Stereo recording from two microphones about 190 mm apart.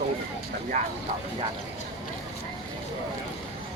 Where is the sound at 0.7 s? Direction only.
40° right (ahead or behind).